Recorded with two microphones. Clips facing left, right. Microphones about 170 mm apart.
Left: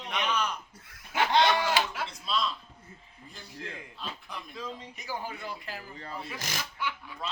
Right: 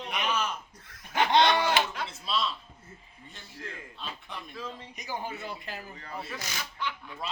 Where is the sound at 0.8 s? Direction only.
10° left (ahead or behind).